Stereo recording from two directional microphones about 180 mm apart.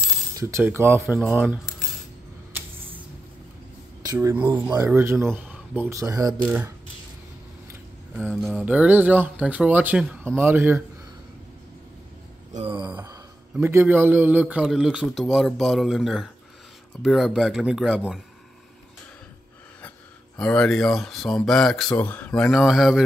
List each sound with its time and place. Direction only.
0.4 s speech: 15° right (ahead or behind)
1.0 s a man's voice: 5° right (ahead or behind)
4.0 s speech: 15° right (ahead or behind)
6.4 s speech: 10° right (ahead or behind)
8.3 s a man's voice: centre (ahead or behind)
12.5 s a sound: 30° right (ahead or behind)
13.0 s a man's voice: 15° right (ahead or behind)
20.3 s a man's voice: 5° left (ahead or behind)